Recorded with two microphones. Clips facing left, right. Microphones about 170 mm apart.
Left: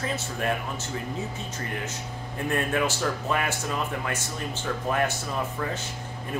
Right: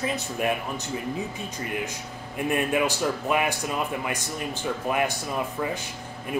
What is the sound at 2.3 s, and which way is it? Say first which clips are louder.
Speech: right 2 dB; 15° right (ahead or behind).